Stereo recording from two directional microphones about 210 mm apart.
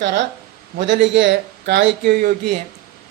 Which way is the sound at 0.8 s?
60° right (ahead or behind).